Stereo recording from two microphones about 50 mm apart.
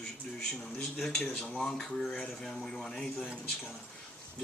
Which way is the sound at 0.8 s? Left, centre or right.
Centre.